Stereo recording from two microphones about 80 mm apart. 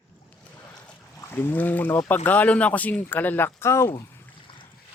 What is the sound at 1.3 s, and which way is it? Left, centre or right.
Speech, left.